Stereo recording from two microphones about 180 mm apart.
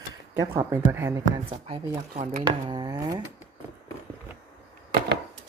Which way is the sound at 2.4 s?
25° right (ahead or behind).